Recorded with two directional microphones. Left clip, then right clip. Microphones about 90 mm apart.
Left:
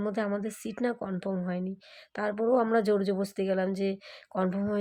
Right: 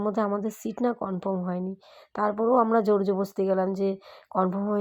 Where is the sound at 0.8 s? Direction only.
25° right (ahead or behind).